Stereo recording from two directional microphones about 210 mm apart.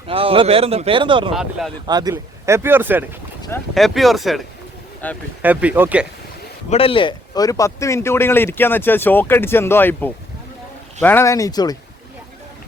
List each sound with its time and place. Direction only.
0.1 s speech: 25° right (ahead or behind)
1.3 s speech: centre (ahead or behind)
1.9 s speech: 20° right (ahead or behind); by 5.2 s 5° left (ahead or behind)
5.4 s speech: 5° right (ahead or behind)
6.7 s speech: 25° left (ahead or behind)